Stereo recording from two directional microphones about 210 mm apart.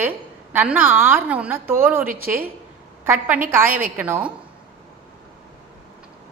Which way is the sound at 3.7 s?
40° right (ahead or behind).